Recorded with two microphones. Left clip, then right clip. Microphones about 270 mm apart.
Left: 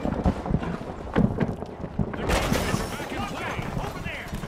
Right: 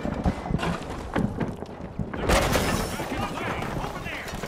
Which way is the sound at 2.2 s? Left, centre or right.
Right.